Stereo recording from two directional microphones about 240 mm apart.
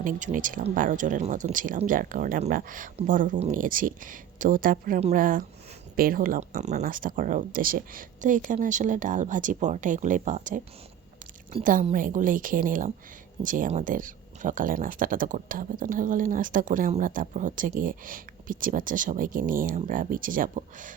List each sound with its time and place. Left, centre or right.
0.0 s speech: right